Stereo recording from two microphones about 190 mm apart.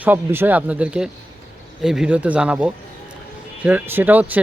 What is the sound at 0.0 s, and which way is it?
Speech, 10° right (ahead or behind).